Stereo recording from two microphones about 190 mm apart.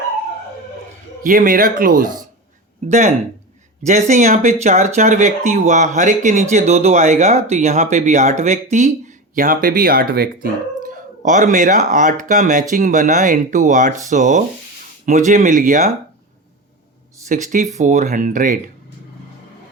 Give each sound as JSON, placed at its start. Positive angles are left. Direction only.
{"t": 1.2, "sound": "speech", "side_deg": -45}
{"t": 3.8, "sound": "speech", "side_deg": -40}
{"t": 10.8, "sound": "speech", "side_deg": -40}
{"t": 17.2, "sound": "speech", "side_deg": -40}